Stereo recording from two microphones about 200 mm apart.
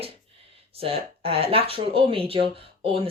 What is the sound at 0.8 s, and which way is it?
A woman's voice, 30° right (ahead or behind).